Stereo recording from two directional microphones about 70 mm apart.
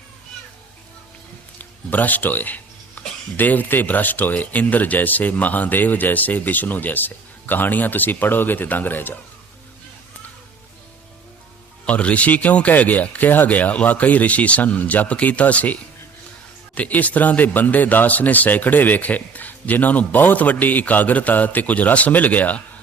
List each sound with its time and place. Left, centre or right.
1.5 s music: left
3.3 s speech: left
11.9 s speech: centre